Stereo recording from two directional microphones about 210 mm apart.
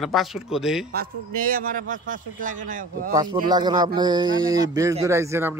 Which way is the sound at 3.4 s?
20° right (ahead or behind).